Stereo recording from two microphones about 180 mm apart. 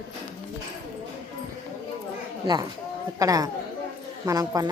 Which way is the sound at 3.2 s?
20° right (ahead or behind).